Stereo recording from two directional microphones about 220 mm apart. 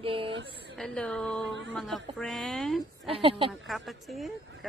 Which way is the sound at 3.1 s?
25° right (ahead or behind).